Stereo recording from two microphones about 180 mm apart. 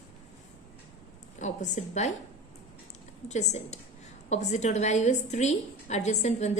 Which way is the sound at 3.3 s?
40° left (ahead or behind).